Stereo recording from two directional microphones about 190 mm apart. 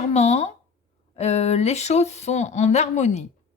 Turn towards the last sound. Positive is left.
turn(degrees=35)  # may be behind; listen again after turning